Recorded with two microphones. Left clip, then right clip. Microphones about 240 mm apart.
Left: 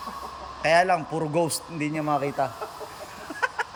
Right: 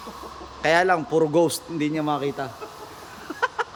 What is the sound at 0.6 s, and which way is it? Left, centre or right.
A man's voice, centre.